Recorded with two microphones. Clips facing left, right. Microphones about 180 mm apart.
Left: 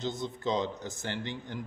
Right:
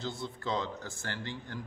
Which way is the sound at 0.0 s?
20° left (ahead or behind).